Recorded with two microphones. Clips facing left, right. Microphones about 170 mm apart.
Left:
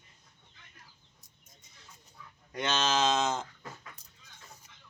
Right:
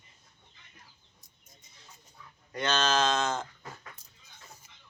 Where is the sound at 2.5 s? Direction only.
20° left (ahead or behind).